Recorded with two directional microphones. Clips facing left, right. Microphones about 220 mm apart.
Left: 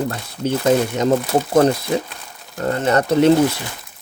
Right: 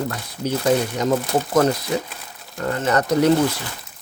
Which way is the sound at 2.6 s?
30° left (ahead or behind).